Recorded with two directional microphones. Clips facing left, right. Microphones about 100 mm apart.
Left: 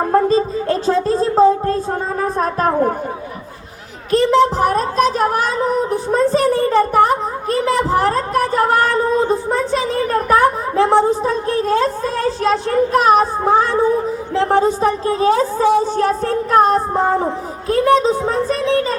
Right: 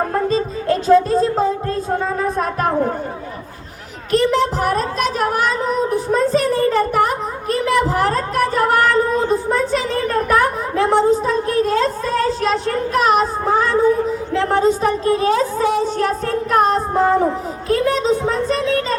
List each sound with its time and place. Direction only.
0.1 s music: 30° left (ahead or behind)
4.1 s a sound: 25° left (ahead or behind)
12.4 s a woman's voice: 25° left (ahead or behind)